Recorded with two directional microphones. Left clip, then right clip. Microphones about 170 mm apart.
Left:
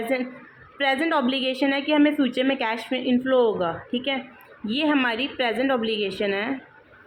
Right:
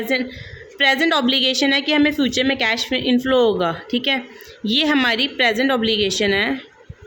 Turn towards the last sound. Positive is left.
turn(degrees=-55)  # may be behind; listen again after turning